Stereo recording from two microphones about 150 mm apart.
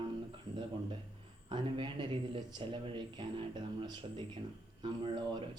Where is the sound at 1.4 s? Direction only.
30° right (ahead or behind).